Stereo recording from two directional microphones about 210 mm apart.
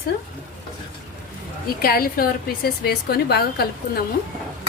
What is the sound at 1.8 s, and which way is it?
A woman's voice, 45° left (ahead or behind).